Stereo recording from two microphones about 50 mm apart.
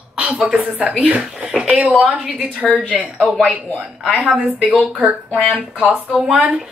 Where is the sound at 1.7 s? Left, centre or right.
Right.